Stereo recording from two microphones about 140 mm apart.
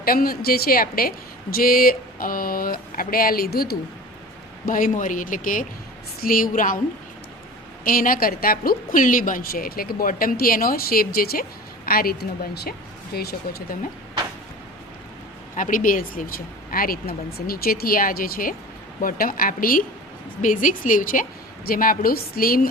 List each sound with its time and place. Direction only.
0.0 s a woman's voice: 90° left
4.6 s a man's voice: 75° left (ahead or behind)
6.2 s a man's voice: 85° left
7.9 s a woman's voice: 90° left
13.1 s a woman's voice: 90° left
15.5 s a woman's voice: 75° left (ahead or behind); by 19.8 s 90° left
20.4 s a woman's voice: 70° left (ahead or behind); by 22.7 s 90° left